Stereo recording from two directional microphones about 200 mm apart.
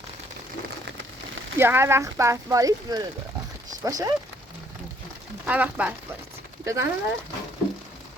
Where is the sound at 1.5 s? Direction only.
10° right (ahead or behind).